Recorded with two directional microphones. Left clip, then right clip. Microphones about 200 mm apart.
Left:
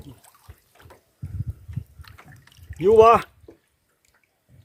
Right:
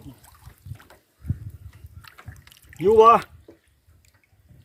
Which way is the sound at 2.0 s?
10° right (ahead or behind).